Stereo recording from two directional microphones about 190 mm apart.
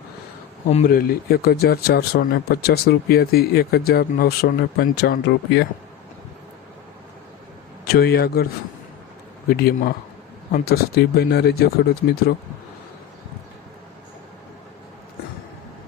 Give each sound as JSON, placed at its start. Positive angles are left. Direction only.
{"t": 0.9, "sound": "speech", "side_deg": 50}
{"t": 7.9, "sound": "speech", "side_deg": 55}
{"t": 9.5, "sound": "speech", "side_deg": 55}